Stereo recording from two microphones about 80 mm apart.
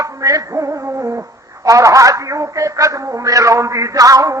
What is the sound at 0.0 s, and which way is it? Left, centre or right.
Music, right.